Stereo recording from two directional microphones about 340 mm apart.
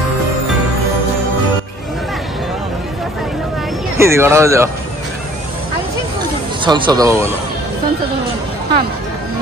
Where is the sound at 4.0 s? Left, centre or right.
Centre.